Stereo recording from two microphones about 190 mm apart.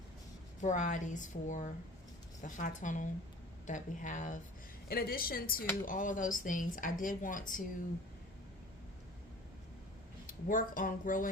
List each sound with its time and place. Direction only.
0.6 s a woman's voice: 40° left (ahead or behind)
4.9 s speech: 50° left (ahead or behind)
10.2 s speech: 45° left (ahead or behind)